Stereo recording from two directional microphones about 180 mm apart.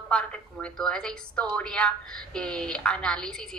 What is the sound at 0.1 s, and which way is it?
A woman's voice, 5° left (ahead or behind).